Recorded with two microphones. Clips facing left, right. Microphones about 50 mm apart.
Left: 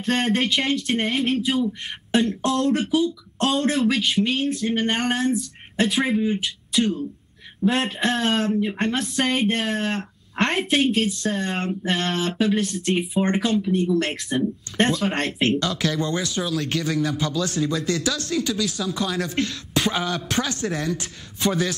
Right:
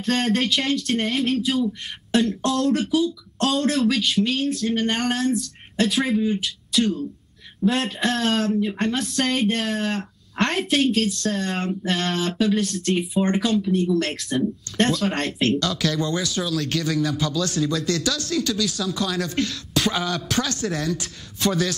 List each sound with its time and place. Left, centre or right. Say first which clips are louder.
0.0 s speech: even; centre
8.5 s speech: even; left
8.8 s speech: even; centre
13.2 s speech: right 1 dB; centre
13.6 s speech: even; left